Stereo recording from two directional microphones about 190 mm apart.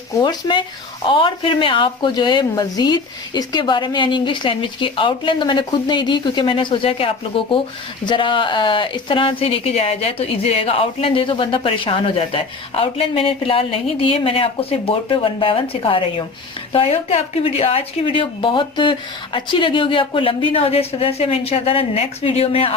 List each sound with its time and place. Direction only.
0.2 s a woman's voice: 25° left (ahead or behind)